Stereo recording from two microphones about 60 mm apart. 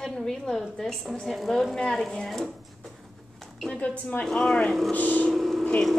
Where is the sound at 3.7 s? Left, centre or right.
Left.